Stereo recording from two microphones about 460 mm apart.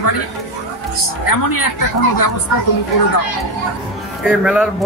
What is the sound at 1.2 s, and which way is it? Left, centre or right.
Speech, left.